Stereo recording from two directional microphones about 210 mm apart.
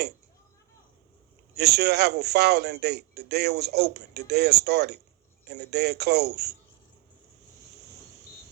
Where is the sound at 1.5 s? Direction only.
50° right (ahead or behind).